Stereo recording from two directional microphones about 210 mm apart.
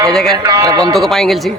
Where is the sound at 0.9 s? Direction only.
Centre (ahead or behind).